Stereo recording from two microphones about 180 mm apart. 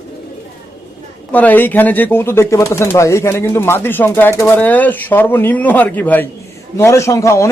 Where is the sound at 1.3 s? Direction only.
10° left (ahead or behind).